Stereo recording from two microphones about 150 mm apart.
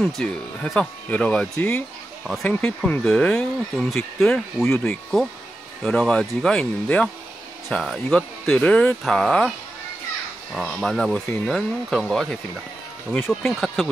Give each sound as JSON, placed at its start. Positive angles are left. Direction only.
{"t": 0.0, "sound": "speech", "side_deg": 5}
{"t": 10.5, "sound": "speech", "side_deg": 0}
{"t": 13.5, "sound": "speech", "side_deg": 0}